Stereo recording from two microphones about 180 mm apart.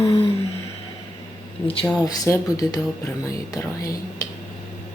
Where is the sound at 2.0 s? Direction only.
20° left (ahead or behind).